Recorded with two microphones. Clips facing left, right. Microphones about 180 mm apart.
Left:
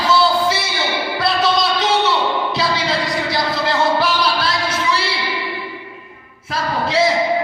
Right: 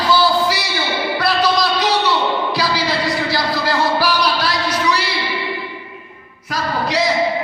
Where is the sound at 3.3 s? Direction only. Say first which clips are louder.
Even; 20° left (ahead or behind).